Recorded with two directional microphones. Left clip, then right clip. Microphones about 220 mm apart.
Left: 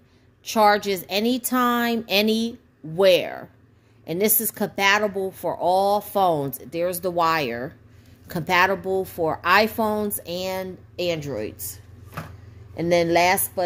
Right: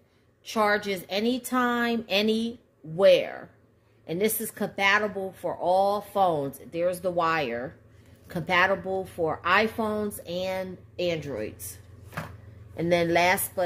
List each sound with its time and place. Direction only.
0.5 s a woman's voice: 45° left (ahead or behind)
12.7 s speech: 35° left (ahead or behind)